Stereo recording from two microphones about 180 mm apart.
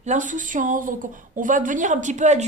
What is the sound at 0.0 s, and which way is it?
A woman's voice, 45° right (ahead or behind).